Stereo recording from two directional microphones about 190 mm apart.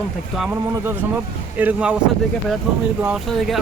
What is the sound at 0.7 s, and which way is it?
Speech, 10° right (ahead or behind).